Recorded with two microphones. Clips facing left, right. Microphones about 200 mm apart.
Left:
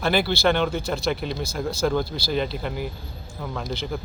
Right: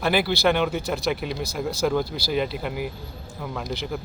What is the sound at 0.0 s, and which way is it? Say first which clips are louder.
A man's voice: even; 5° right (ahead or behind).